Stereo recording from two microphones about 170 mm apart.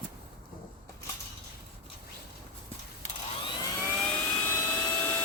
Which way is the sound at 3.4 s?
25° left (ahead or behind).